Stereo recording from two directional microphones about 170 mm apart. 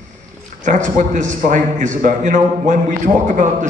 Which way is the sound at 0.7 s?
45° right (ahead or behind).